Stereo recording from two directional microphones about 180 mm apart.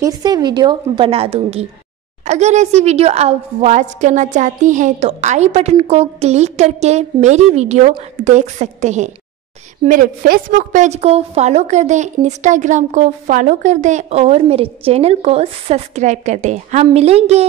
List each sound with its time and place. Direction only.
0.0 s a woman's voice: 20° right (ahead or behind)